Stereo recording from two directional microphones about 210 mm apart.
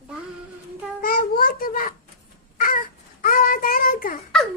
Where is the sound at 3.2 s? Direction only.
40° left (ahead or behind).